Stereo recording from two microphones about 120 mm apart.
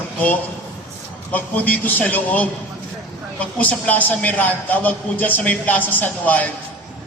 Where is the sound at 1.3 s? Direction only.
15° left (ahead or behind).